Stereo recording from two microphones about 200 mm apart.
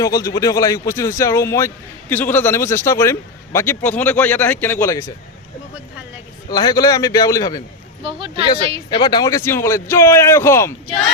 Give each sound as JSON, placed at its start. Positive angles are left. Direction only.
{"t": 0.0, "sound": "a man's voice", "side_deg": 15}
{"t": 6.5, "sound": "a man's voice", "side_deg": 20}
{"t": 8.0, "sound": "speech", "side_deg": -25}
{"t": 8.9, "sound": "a man's voice", "side_deg": 25}